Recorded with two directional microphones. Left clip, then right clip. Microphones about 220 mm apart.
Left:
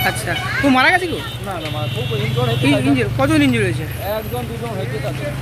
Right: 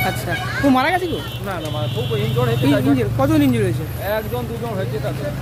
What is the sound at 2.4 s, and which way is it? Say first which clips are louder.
Speech: left 1 dB; 5° right (ahead or behind).